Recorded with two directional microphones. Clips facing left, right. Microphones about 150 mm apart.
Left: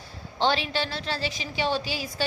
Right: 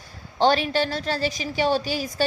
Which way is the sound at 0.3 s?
45° right (ahead or behind).